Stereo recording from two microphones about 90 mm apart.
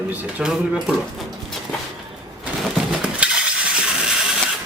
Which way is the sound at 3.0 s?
10° right (ahead or behind).